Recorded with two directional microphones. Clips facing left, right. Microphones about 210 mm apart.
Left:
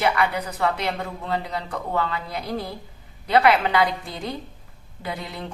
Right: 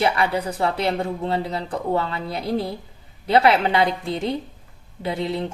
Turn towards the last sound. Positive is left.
turn(degrees=-25)  # may be behind; listen again after turning